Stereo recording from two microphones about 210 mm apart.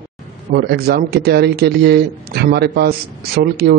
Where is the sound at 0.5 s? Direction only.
50° right (ahead or behind).